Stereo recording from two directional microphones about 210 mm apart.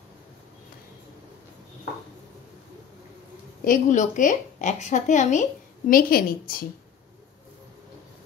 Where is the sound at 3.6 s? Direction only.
40° left (ahead or behind).